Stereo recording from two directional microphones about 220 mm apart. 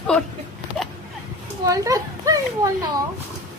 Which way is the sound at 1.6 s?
15° right (ahead or behind).